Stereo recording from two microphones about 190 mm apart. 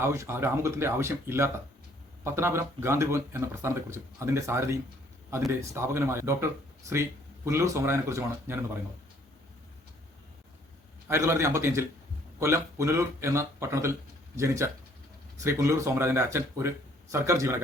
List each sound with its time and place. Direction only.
0.0 s speech: 15° right (ahead or behind)
11.1 s speech: 15° right (ahead or behind)